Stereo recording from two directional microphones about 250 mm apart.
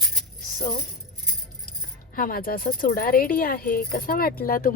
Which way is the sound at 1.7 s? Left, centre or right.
Left.